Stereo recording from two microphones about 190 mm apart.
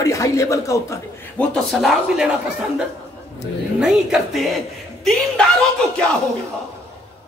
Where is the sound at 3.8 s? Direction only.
5° right (ahead or behind).